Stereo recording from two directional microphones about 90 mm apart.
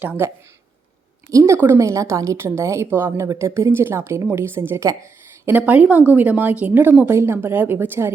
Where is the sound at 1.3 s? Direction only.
40° right (ahead or behind).